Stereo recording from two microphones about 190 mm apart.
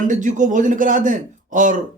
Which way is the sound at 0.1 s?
40° right (ahead or behind).